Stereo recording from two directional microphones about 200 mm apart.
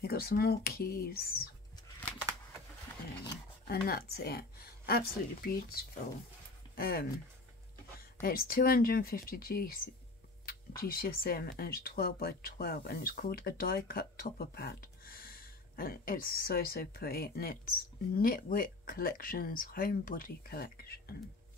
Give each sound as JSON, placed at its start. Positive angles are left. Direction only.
{"t": 0.0, "sound": "speech", "side_deg": 50}
{"t": 3.8, "sound": "speech", "side_deg": 50}
{"t": 8.2, "sound": "speech", "side_deg": 45}